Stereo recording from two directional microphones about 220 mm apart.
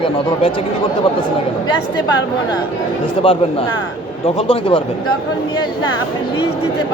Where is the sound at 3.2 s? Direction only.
25° left (ahead or behind).